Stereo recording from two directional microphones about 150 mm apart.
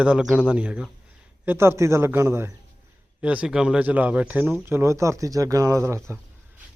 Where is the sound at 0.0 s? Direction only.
5° right (ahead or behind).